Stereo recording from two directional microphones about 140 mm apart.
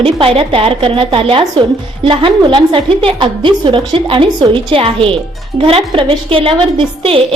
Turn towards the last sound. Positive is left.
turn(degrees=-35)  # may be behind; listen again after turning